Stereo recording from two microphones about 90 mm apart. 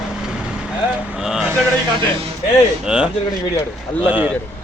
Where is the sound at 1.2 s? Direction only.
5° right (ahead or behind).